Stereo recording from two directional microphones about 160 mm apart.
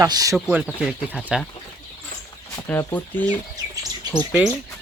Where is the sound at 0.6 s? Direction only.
Centre (ahead or behind).